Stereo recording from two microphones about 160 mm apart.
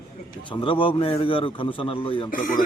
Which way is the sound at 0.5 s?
35° left (ahead or behind).